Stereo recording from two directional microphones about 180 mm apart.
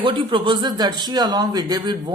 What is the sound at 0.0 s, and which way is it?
Speech, 25° right (ahead or behind).